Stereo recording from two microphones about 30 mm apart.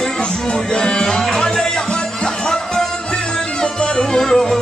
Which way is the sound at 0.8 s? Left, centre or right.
Left.